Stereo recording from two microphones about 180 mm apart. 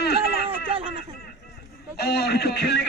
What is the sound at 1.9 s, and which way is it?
Speech, 60° left (ahead or behind).